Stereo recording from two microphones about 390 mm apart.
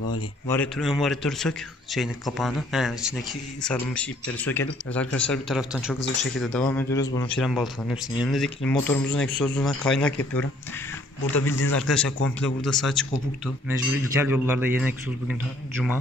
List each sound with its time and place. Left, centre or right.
0.5 s speech: centre
11.5 s a man's voice: left
11.8 s speech: centre
14.2 s speech: centre